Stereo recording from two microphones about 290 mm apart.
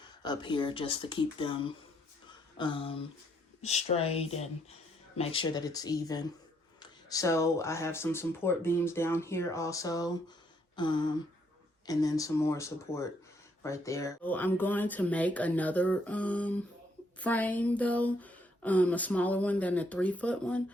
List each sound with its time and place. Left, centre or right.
0.2 s speech: centre